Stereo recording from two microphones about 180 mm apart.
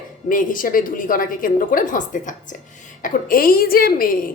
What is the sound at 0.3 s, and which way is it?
A woman's voice, 50° left (ahead or behind).